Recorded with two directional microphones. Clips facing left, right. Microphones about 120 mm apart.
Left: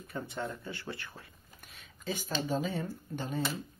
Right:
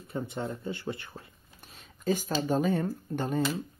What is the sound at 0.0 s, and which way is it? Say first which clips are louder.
Speech: right 3 dB; 25° right (ahead or behind).